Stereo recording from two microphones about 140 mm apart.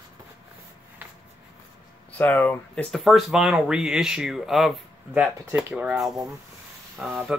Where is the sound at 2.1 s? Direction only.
15° left (ahead or behind).